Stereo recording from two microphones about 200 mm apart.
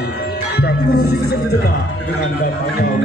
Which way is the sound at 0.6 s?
50° left (ahead or behind).